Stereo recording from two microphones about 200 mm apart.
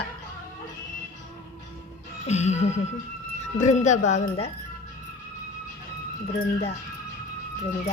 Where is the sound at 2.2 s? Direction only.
35° left (ahead or behind).